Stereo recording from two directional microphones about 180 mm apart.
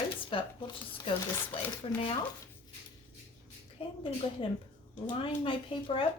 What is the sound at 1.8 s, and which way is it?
Speech, 30° left (ahead or behind).